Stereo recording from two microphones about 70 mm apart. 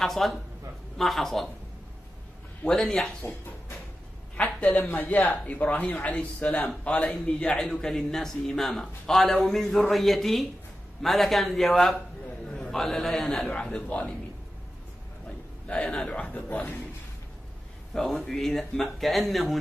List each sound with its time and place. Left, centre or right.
0.0 s speech: centre
2.8 s a man's voice: centre
4.4 s a woman's voice: centre
15.6 s a man's voice: centre
18.2 s speech: centre